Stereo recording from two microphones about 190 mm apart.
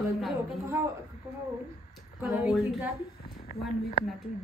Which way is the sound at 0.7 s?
15° right (ahead or behind).